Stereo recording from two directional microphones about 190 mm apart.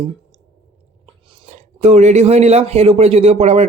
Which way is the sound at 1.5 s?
35° right (ahead or behind).